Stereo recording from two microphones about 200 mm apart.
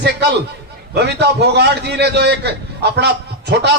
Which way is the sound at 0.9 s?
55° right (ahead or behind).